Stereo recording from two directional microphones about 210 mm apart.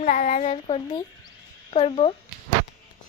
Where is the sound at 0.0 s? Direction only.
40° left (ahead or behind).